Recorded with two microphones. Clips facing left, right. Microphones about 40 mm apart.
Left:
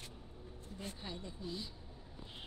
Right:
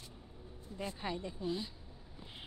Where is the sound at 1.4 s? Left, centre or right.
Right.